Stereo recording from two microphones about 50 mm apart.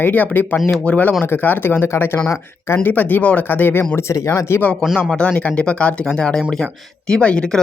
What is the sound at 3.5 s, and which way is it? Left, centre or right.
Speech, left.